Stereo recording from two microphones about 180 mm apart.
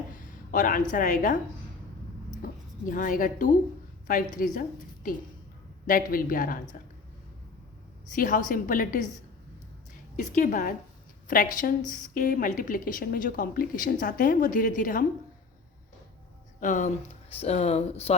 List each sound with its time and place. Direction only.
0.5 s a woman's voice: 45° left (ahead or behind)
2.4 s a woman's voice: 50° left (ahead or behind)
5.8 s a woman's voice: 50° left (ahead or behind)
8.1 s a woman's voice: 50° left (ahead or behind)
10.2 s a woman's voice: 45° left (ahead or behind)
16.6 s speech: 45° left (ahead or behind)